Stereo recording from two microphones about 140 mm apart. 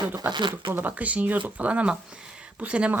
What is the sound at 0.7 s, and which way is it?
Speech, 10° right (ahead or behind).